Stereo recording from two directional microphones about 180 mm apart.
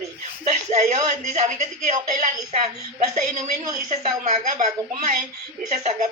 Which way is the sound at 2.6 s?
40° right (ahead or behind).